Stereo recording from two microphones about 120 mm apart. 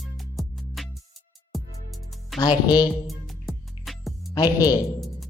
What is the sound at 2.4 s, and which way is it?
Speech, 40° left (ahead or behind).